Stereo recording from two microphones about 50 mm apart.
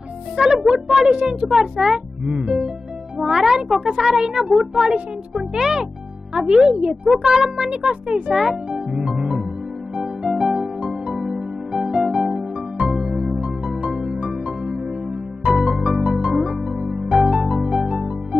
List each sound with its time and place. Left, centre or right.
0.4 s speech: centre
1.1 s a child's voice: centre
9.9 s music: centre
15.5 s music: centre